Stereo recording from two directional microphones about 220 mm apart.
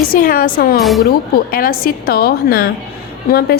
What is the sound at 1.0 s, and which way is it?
A woman's voice, 40° left (ahead or behind).